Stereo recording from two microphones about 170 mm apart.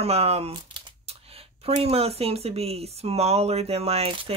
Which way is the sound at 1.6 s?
35° right (ahead or behind).